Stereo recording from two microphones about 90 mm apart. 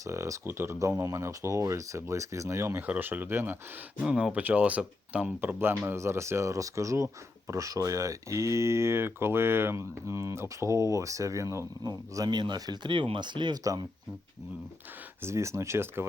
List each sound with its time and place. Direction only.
0.0 s speech: 35° right (ahead or behind)
2.8 s speech: 20° right (ahead or behind)
4.0 s speech: 10° right (ahead or behind); by 13.6 s 55° right (ahead or behind)
15.2 s speech: 30° right (ahead or behind)